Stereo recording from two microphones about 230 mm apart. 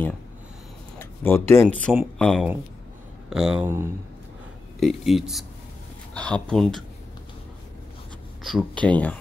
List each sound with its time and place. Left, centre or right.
0.9 s speech: centre
8.5 s speech: centre